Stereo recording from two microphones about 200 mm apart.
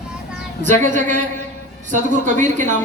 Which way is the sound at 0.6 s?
35° right (ahead or behind).